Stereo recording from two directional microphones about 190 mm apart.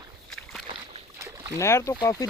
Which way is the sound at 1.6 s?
15° left (ahead or behind).